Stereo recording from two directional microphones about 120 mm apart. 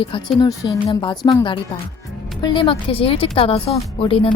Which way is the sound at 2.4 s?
40° left (ahead or behind).